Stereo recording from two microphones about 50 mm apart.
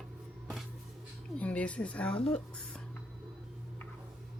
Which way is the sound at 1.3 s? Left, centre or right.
Left.